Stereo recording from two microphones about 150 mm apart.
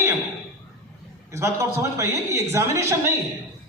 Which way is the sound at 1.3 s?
20° right (ahead or behind).